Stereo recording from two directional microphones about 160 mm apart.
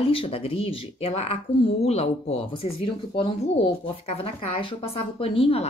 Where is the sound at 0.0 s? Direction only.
35° left (ahead or behind).